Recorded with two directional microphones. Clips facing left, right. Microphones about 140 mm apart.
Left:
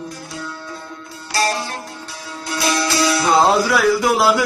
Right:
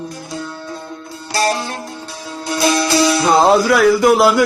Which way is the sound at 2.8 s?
20° right (ahead or behind).